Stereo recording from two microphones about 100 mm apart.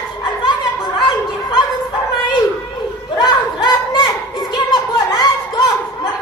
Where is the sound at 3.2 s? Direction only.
45° left (ahead or behind).